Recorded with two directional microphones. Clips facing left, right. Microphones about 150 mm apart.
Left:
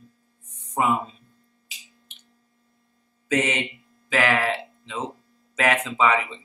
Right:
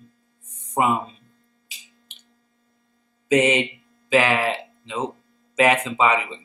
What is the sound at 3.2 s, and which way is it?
Speech, 15° right (ahead or behind).